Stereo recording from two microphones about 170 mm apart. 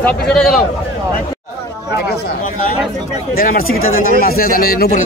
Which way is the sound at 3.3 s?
60° left (ahead or behind).